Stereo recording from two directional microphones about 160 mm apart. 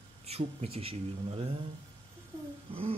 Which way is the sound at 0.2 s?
40° right (ahead or behind).